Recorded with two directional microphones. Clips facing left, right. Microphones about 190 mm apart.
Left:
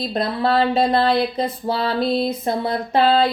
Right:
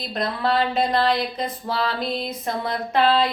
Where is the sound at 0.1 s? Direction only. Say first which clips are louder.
Left 2 dB; 30° left (ahead or behind).